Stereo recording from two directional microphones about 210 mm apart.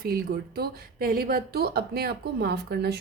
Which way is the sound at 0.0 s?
45° right (ahead or behind).